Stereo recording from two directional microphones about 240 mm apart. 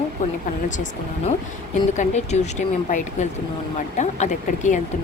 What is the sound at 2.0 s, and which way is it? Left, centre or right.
A woman's voice, left.